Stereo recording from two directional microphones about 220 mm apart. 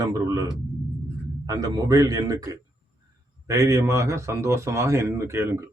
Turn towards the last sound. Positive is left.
turn(degrees=-10)  # may be behind; listen again after turning